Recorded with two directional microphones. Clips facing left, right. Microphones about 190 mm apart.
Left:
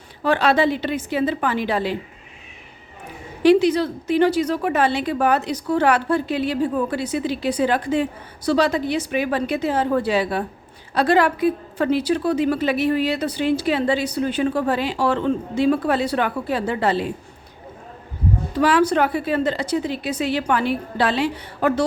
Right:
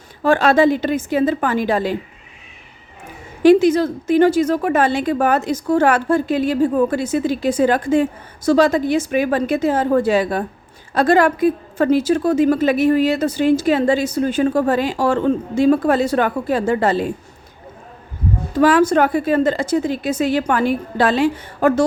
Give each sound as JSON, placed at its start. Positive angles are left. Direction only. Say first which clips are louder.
{"t": 0.2, "sound": "a woman's voice", "louder": "right 4 dB", "side_deg": -45}
{"t": 3.4, "sound": "a woman's voice", "louder": "right 4 dB", "side_deg": -45}
{"t": 18.5, "sound": "a woman's voice", "louder": "right 4 dB", "side_deg": -45}